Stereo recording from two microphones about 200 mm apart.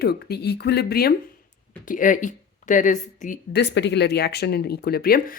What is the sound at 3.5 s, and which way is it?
Speech, 55° left (ahead or behind).